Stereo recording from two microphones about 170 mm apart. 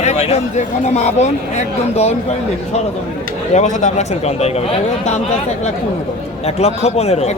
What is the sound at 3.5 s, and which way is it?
Speech, 45° left (ahead or behind).